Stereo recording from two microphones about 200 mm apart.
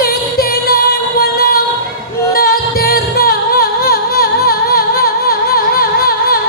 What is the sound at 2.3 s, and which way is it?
Music, 50° left (ahead or behind).